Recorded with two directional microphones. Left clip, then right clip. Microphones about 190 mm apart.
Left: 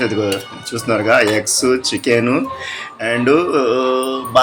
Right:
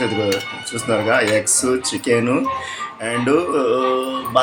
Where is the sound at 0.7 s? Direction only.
10° left (ahead or behind).